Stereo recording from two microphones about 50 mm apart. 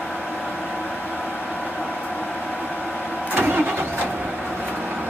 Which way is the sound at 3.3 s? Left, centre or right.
Right.